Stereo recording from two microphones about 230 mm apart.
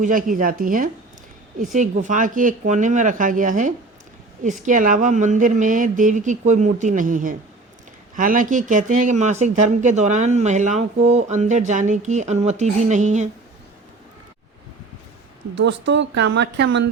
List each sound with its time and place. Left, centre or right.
0.0 s speech: right
15.5 s speech: right